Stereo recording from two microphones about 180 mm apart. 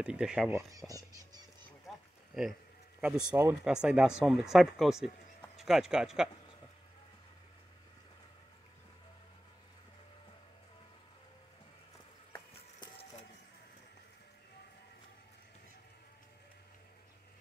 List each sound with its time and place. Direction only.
0.0 s speech: 5° right (ahead or behind)
0.7 s a sound: 20° right (ahead or behind)
3.0 s speech: 5° right (ahead or behind)
12.8 s vehicle: 35° left (ahead or behind)